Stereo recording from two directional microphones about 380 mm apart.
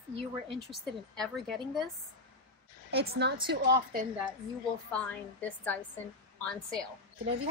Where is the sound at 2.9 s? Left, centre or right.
Right.